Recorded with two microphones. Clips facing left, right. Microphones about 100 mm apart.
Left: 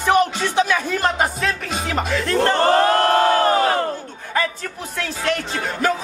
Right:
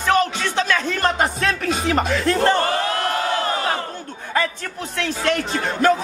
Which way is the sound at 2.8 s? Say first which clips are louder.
Left 7 dB; 50° left (ahead or behind).